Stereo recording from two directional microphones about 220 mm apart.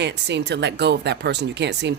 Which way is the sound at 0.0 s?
50° right (ahead or behind).